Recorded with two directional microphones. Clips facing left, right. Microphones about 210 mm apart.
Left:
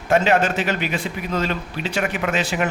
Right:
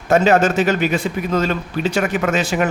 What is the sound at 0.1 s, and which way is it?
A man's voice, 45° right (ahead or behind).